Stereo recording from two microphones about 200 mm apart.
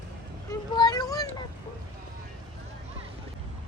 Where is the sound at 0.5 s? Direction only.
20° left (ahead or behind).